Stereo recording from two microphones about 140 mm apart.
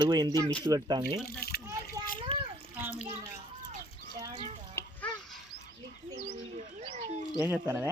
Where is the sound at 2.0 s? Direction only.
25° right (ahead or behind).